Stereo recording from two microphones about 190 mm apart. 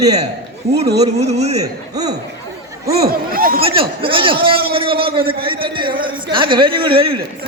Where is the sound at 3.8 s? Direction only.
25° right (ahead or behind).